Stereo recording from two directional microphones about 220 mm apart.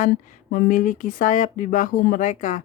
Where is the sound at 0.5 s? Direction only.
40° left (ahead or behind).